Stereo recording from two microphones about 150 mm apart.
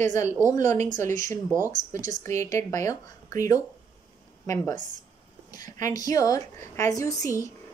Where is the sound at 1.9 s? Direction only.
20° left (ahead or behind).